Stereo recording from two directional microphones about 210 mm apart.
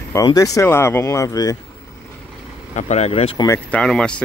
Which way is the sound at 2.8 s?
30° left (ahead or behind).